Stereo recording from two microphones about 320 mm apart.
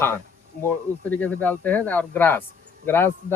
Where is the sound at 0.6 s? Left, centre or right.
Centre.